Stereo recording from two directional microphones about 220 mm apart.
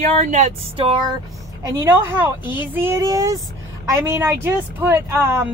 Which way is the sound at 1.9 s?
10° right (ahead or behind).